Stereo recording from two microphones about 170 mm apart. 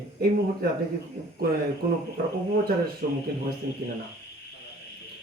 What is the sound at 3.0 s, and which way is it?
Speech, 65° right (ahead or behind).